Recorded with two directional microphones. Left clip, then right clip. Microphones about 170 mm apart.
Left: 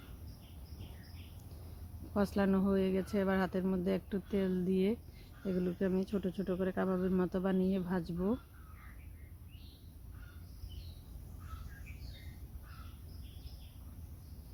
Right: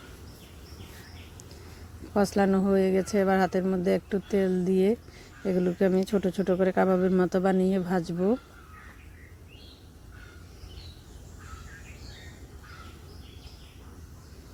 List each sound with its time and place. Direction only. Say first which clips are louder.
2.1 s speech: right 9 dB; 15° right (ahead or behind)